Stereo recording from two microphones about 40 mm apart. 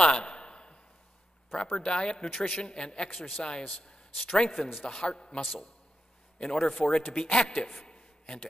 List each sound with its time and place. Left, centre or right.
0.0 s a sound: left
1.6 s speech: left
3.2 s a man's voice: centre
3.4 s speech: left
5.4 s a man's voice: centre
6.3 s speech: left
6.9 s speech: left
7.2 s a man's voice: left